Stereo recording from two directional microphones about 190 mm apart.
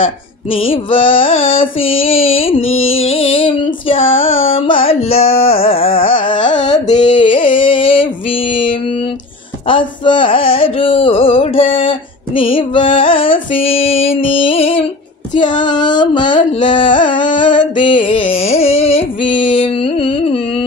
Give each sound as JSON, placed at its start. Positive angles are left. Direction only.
{"t": 0.5, "sound": "music", "side_deg": 30}
{"t": 2.6, "sound": "carnatic music", "side_deg": 90}
{"t": 3.0, "sound": "music", "side_deg": 30}
{"t": 7.0, "sound": "a sound", "side_deg": 25}
{"t": 9.7, "sound": "music", "side_deg": 25}